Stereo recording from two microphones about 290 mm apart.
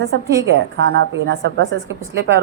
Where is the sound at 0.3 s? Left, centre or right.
Right.